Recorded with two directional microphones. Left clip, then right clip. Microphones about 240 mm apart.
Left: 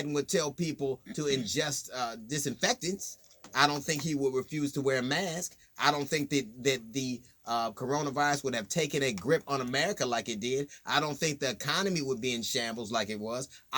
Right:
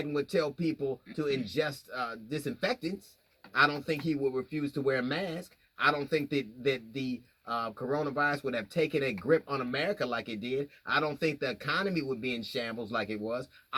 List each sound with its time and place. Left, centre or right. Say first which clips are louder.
0.0 s speech: even; left